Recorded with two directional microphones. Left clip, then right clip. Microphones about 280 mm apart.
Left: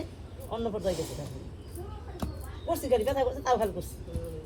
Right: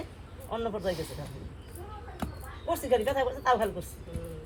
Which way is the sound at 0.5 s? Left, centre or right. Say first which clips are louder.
Right 1 dB; right.